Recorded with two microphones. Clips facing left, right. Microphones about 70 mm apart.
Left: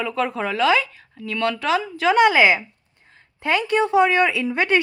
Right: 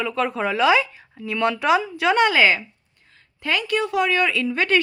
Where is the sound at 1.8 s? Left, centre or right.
Centre.